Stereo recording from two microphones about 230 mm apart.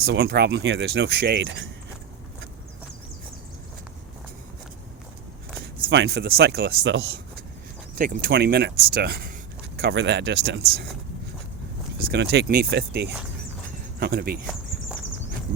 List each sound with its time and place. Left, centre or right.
0.0 s speech: right
5.9 s speech: right
12.1 s speech: right